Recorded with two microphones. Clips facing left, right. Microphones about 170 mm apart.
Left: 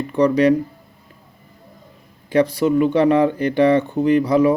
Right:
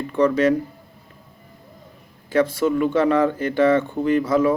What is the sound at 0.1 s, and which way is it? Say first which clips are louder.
Speech: left 3 dB; 15° left (ahead or behind).